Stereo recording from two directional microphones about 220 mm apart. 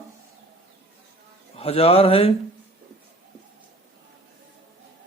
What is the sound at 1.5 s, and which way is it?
Speech, 25° left (ahead or behind).